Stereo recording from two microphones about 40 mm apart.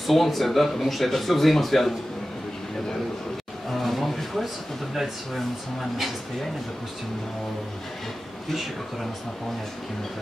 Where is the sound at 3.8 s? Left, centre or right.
Centre.